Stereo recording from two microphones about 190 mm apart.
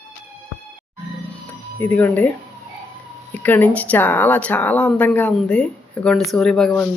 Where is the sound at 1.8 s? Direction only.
10° left (ahead or behind).